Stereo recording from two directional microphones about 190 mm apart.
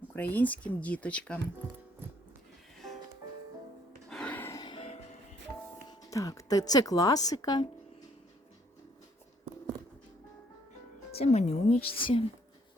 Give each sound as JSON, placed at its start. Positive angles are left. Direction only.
{"t": 0.1, "sound": "speech", "side_deg": 10}
{"t": 2.7, "sound": "music", "side_deg": 0}
{"t": 4.1, "sound": "music", "side_deg": 5}
{"t": 5.9, "sound": "speech", "side_deg": 20}
{"t": 11.1, "sound": "a woman's voice", "side_deg": 35}